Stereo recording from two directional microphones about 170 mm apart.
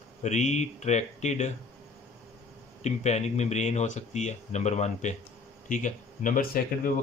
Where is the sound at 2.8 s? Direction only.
40° left (ahead or behind).